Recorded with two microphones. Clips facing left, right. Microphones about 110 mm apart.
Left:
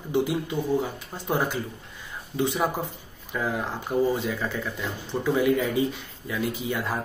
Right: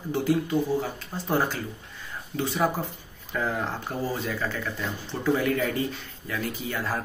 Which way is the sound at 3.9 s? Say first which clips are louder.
Left 11 dB; 15° left (ahead or behind).